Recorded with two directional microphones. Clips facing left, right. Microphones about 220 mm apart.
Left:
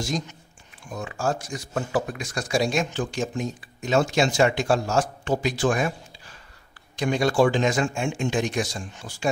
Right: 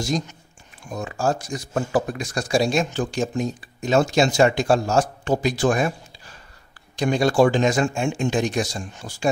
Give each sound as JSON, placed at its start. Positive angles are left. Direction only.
{"t": 0.8, "sound": "speech", "side_deg": -40}
{"t": 7.0, "sound": "speech", "side_deg": -35}